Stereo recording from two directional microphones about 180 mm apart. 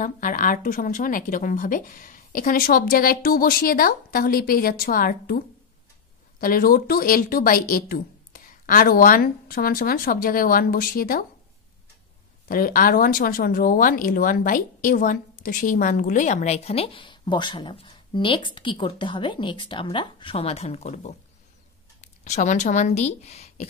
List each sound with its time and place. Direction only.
0.0 s speech: 50° left (ahead or behind)
6.4 s speech: 50° left (ahead or behind)
12.4 s speech: 55° left (ahead or behind); by 23.7 s 35° left (ahead or behind)